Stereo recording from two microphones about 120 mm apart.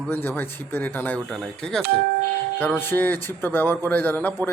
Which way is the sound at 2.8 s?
15° left (ahead or behind).